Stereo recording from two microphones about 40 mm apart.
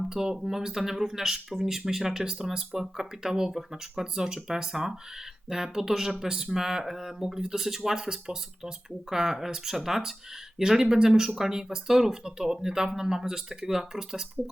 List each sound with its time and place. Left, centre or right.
0.1 s speech: centre